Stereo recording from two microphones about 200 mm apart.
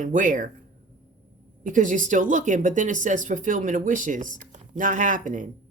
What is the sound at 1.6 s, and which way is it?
Speech, 40° right (ahead or behind).